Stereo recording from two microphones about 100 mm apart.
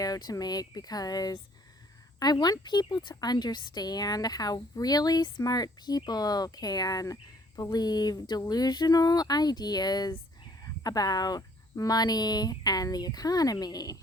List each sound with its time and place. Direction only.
0.0 s speech: 40° left (ahead or behind)